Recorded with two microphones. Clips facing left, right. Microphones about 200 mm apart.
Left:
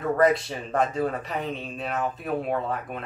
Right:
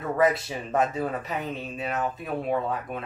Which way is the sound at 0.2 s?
5° right (ahead or behind).